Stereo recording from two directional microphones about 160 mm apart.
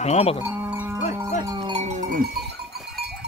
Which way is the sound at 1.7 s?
50° right (ahead or behind).